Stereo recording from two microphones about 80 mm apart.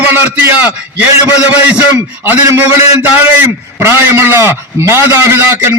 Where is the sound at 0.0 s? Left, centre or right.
Right.